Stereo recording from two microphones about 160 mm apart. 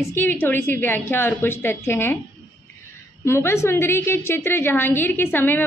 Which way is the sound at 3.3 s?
15° left (ahead or behind).